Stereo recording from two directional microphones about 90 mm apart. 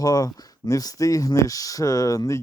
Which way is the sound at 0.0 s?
45° left (ahead or behind).